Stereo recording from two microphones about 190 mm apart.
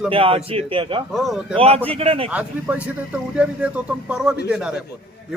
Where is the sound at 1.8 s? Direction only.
30° right (ahead or behind).